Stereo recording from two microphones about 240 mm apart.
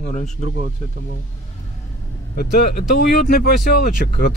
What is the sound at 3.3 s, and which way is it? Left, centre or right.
Speech, left.